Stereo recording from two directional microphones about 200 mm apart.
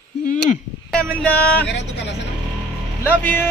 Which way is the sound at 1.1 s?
5° left (ahead or behind).